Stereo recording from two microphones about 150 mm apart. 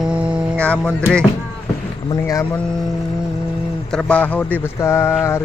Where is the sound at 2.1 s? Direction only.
20° left (ahead or behind).